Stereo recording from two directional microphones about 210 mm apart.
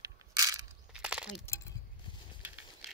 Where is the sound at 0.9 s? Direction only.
5° right (ahead or behind).